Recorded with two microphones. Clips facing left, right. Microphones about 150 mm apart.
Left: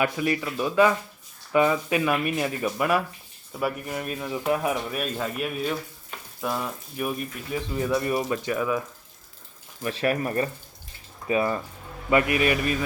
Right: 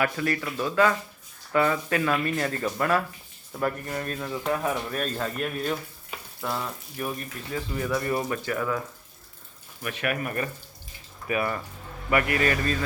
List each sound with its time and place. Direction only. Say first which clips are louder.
0.0 s speech: left 2 dB; 15° left (ahead or behind)
9.8 s speech: left 4 dB; 30° left (ahead or behind); by 12.8 s 15° left (ahead or behind)